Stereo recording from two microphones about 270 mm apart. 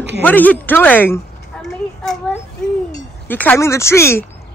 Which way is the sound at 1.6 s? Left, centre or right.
Centre.